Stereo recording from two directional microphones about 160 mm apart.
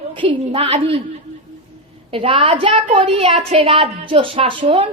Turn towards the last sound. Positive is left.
turn(degrees=-35)  # may be behind; listen again after turning